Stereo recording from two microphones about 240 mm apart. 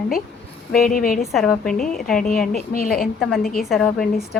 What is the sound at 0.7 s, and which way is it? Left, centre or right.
Speech, left.